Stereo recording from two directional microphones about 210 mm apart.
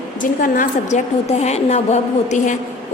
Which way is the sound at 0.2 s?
40° left (ahead or behind).